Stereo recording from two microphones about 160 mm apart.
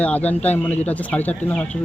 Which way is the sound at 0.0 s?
10° left (ahead or behind).